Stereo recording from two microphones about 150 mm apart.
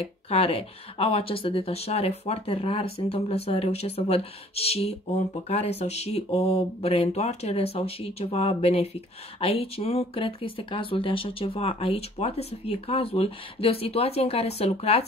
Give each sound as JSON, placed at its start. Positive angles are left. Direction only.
{"t": 0.0, "sound": "speech", "side_deg": 40}